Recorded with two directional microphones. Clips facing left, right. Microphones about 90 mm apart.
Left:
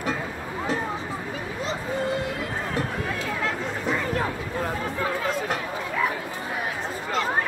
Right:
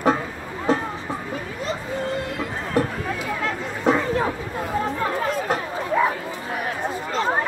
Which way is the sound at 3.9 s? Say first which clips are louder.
Right 4 dB; 20° right (ahead or behind).